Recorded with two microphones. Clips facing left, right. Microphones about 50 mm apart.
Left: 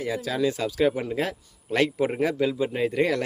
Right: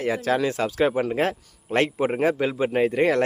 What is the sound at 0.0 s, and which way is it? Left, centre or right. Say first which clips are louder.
A man's voice: right 3 dB; right.